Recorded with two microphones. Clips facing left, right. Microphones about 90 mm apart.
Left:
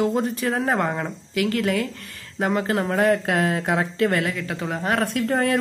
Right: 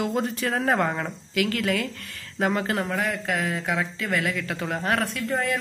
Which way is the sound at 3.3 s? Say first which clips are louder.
Left 5 dB; 55° left (ahead or behind).